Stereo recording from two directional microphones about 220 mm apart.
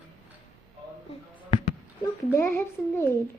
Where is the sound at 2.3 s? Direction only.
10° left (ahead or behind).